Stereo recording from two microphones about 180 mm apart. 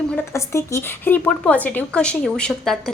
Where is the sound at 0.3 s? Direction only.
15° left (ahead or behind).